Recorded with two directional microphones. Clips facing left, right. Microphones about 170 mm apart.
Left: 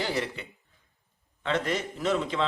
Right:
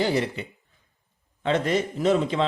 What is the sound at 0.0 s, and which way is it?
Speech, 20° right (ahead or behind).